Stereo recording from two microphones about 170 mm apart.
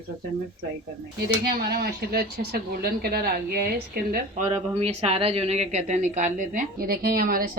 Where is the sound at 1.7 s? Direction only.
65° right (ahead or behind).